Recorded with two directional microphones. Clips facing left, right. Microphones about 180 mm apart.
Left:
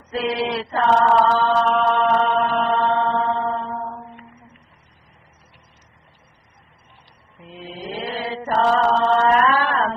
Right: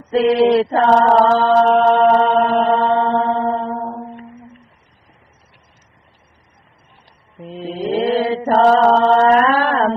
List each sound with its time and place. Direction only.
0.2 s mantra: 35° right (ahead or behind)
7.4 s mantra: 30° right (ahead or behind)
7.9 s chant: 35° right (ahead or behind)
8.9 s mantra: 35° right (ahead or behind)